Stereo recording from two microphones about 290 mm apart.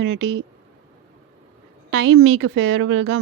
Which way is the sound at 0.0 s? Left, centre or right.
Right.